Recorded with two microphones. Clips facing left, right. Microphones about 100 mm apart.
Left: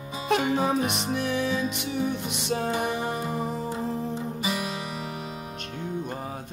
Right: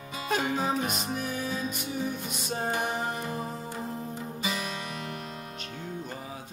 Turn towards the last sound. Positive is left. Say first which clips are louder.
# left 4 dB
turn(degrees=10)  # may be behind; listen again after turning